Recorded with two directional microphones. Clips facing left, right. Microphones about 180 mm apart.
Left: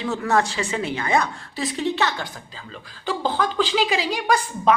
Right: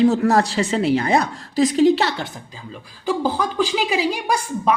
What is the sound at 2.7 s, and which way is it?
A woman's voice, 10° right (ahead or behind).